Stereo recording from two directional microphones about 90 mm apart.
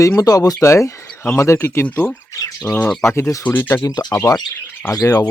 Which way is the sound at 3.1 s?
35° left (ahead or behind).